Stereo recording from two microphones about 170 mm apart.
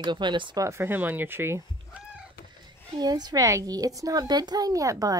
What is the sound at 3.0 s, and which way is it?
A woman's voice, 25° right (ahead or behind).